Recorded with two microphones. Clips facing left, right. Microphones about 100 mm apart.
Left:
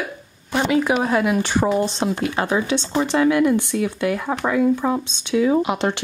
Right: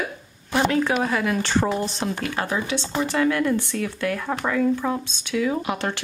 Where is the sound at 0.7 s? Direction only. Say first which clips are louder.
Left 4 dB; 10° left (ahead or behind).